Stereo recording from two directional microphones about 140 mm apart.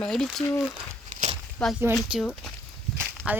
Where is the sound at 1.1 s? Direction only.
55° right (ahead or behind).